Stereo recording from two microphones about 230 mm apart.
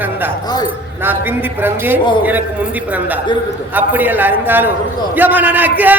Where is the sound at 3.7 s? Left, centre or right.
Centre.